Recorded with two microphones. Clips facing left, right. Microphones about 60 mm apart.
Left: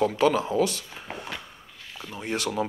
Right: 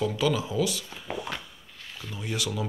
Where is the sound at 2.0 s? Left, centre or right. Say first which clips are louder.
Left 3 dB; left.